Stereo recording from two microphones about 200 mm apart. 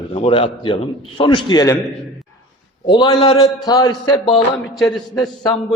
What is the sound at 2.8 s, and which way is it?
A man's voice, 20° left (ahead or behind).